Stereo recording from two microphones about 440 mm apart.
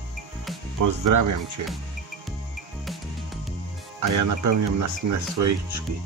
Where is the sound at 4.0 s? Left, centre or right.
Right.